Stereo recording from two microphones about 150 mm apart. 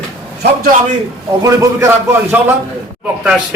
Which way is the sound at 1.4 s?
15° right (ahead or behind).